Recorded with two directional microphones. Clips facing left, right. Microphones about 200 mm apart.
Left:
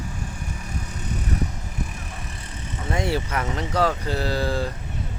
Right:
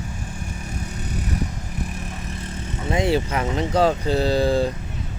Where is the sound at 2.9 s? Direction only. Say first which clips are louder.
Right 4 dB; 20° right (ahead or behind).